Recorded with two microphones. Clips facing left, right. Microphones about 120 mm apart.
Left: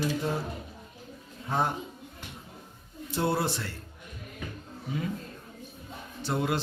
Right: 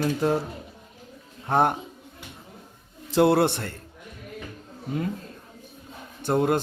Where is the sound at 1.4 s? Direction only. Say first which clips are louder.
Right 7 dB; 60° right (ahead or behind).